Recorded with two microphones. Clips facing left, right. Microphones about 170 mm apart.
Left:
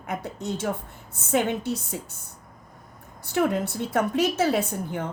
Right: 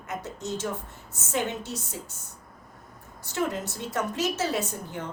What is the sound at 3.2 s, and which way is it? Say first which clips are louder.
A woman's voice: left 6 dB; 60° left (ahead or behind).